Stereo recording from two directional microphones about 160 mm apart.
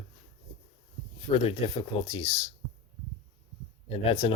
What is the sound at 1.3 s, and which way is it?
Speech, 40° left (ahead or behind).